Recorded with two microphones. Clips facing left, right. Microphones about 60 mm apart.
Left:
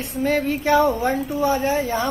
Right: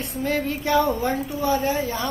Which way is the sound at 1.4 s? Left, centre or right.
Left.